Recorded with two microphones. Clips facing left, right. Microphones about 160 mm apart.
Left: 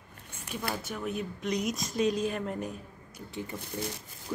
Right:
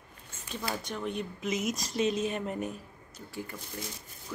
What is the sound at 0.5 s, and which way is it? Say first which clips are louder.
Speech: even; 10° left (ahead or behind).